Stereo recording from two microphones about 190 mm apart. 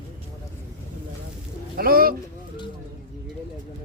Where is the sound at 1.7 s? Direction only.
50° right (ahead or behind).